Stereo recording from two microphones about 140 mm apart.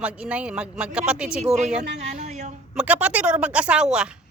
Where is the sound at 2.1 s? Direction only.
60° right (ahead or behind).